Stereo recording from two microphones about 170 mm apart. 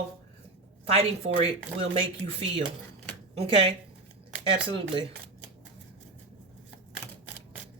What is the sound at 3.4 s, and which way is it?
Speech, 35° right (ahead or behind).